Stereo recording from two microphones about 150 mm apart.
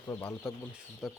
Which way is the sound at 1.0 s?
Centre (ahead or behind).